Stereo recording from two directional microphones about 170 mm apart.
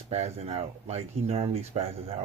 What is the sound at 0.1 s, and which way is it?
Speech, 40° right (ahead or behind).